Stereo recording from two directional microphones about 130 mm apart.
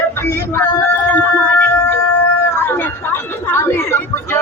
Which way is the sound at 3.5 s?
15° left (ahead or behind).